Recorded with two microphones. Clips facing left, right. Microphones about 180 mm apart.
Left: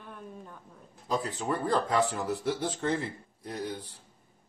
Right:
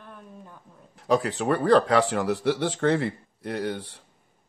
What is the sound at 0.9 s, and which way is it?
Speech, 75° right (ahead or behind).